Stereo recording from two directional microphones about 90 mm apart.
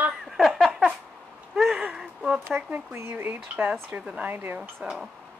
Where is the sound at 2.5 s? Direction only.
15° right (ahead or behind).